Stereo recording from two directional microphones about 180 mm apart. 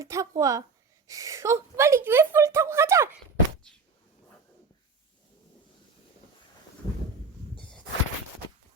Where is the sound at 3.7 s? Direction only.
5° left (ahead or behind).